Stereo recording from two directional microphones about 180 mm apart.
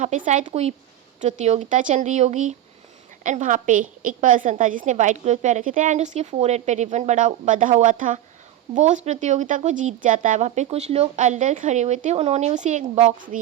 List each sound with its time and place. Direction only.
0.3 s a woman's voice: 40° right (ahead or behind)